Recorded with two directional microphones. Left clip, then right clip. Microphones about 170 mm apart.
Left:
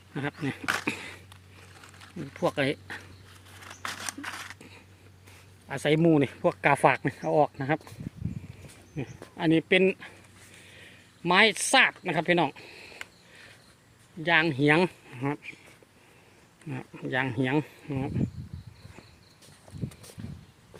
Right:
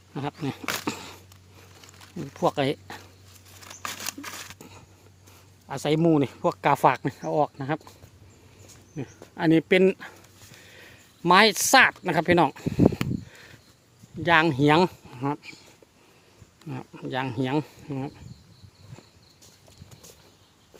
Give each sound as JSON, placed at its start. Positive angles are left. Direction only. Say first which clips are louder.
{"t": 0.1, "sound": "speech", "louder": "right 1 dB", "side_deg": -15}
{"t": 3.7, "sound": "scissors", "louder": "right 2 dB", "side_deg": -25}
{"t": 5.6, "sound": "speech", "louder": "right 1 dB", "side_deg": -15}
{"t": 9.0, "sound": "a sound", "louder": "right 1 dB", "side_deg": -20}
{"t": 9.4, "sound": "speech", "louder": "right 3 dB", "side_deg": -35}
{"t": 14.3, "sound": "speech", "louder": "right 4 dB", "side_deg": -40}
{"t": 14.6, "sound": "speech", "louder": "right 3 dB", "side_deg": -25}
{"t": 16.6, "sound": "speech", "louder": "even", "side_deg": -15}